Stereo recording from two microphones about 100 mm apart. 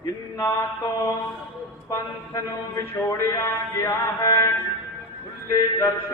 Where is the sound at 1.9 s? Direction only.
30° left (ahead or behind).